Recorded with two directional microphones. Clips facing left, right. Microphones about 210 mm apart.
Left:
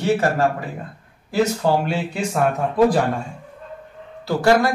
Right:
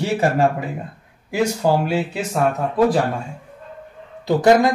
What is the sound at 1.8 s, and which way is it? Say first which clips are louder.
Speech: right 2 dB; 5° right (ahead or behind).